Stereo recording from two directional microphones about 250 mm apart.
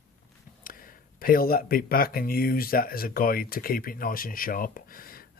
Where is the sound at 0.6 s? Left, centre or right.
Left.